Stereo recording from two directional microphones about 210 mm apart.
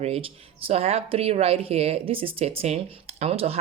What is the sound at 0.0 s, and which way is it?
Speech, 30° right (ahead or behind).